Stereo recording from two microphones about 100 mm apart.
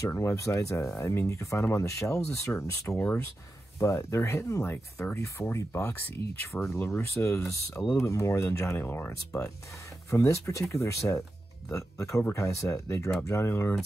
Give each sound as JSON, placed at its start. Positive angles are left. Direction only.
{"t": 0.0, "sound": "speech", "side_deg": 30}